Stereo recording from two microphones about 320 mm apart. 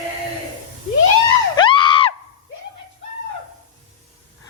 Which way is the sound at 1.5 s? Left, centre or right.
Centre.